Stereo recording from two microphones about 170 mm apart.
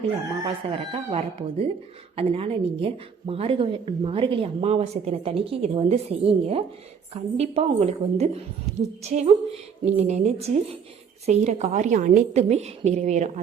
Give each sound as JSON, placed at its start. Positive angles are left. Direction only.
{"t": 0.4, "sound": "a woman's voice", "side_deg": -35}